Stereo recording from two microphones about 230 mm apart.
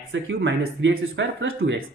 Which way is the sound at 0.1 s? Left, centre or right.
Right.